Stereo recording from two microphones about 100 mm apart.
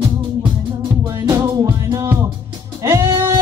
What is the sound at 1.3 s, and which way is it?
Music, 25° right (ahead or behind).